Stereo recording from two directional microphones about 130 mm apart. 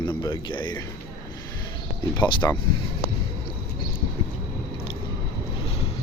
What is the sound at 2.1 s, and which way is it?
Speech, 35° left (ahead or behind).